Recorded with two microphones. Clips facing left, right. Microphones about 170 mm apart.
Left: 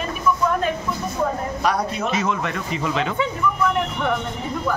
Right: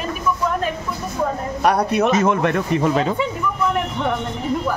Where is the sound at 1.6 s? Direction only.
60° right (ahead or behind); by 3.1 s 45° right (ahead or behind).